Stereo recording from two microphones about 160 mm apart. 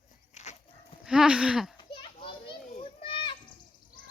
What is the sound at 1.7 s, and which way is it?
Children playing, 30° left (ahead or behind).